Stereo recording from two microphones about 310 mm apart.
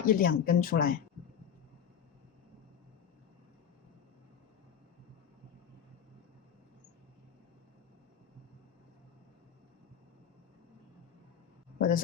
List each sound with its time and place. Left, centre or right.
0.0 s speech: left
11.8 s speech: left